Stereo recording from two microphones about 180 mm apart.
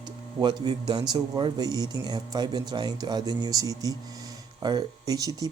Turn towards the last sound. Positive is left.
turn(degrees=-20)  # may be behind; listen again after turning